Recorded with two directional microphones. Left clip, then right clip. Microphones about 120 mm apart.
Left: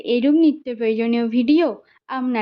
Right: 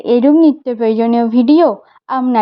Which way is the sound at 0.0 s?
35° right (ahead or behind).